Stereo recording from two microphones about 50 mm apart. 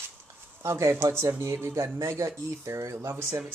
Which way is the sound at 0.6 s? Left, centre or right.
Right.